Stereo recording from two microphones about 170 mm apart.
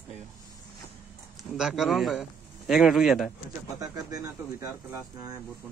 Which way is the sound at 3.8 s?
20° right (ahead or behind).